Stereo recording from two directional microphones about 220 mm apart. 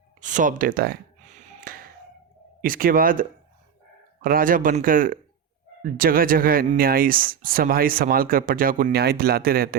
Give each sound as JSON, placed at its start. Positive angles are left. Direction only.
{"t": 0.2, "sound": "speech", "side_deg": -35}
{"t": 1.4, "sound": "music", "side_deg": -40}
{"t": 2.6, "sound": "speech", "side_deg": -40}